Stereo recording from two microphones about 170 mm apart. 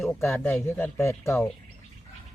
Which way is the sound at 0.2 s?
10° left (ahead or behind).